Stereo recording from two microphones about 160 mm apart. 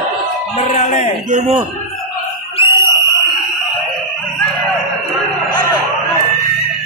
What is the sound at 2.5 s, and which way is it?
Alarm, 30° left (ahead or behind).